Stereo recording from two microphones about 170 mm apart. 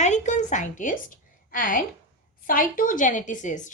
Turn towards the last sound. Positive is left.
turn(degrees=45)  # may be behind; listen again after turning